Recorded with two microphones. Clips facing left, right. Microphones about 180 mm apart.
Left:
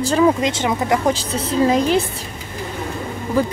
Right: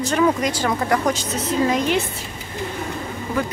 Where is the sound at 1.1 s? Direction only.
30° left (ahead or behind).